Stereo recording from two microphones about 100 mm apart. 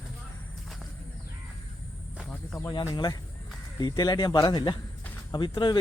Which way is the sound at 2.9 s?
45° left (ahead or behind).